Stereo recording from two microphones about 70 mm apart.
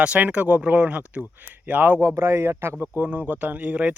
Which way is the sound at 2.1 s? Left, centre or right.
Right.